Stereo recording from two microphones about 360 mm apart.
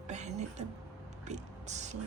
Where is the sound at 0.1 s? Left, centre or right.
Centre.